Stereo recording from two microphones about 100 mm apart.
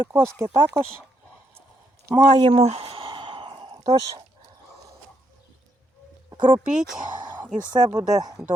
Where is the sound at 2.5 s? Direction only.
90° right; by 3.8 s 60° right (ahead or behind).